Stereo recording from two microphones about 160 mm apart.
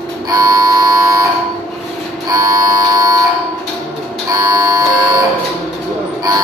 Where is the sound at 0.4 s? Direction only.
25° right (ahead or behind).